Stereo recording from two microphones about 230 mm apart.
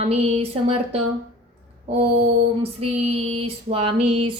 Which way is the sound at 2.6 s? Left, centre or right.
Right.